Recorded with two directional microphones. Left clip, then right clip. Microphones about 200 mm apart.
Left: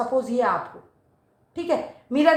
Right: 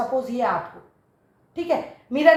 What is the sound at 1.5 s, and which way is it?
Speech, 45° left (ahead or behind).